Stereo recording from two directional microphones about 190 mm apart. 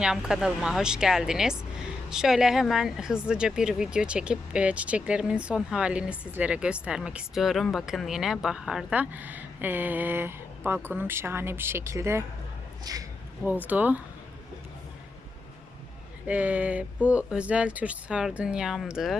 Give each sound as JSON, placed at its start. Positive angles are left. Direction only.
{"t": 0.0, "sound": "a man's voice", "side_deg": -5}
{"t": 13.4, "sound": "speech", "side_deg": -10}
{"t": 16.2, "sound": "speech", "side_deg": -5}